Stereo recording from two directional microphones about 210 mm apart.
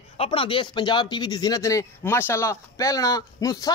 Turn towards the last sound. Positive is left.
turn(degrees=15)  # may be behind; listen again after turning